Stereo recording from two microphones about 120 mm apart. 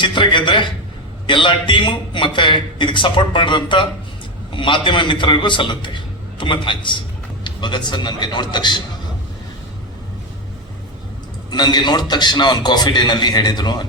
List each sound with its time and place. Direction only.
0.0 s a man's voice: 40° left (ahead or behind)
11.5 s a man's voice: 35° left (ahead or behind)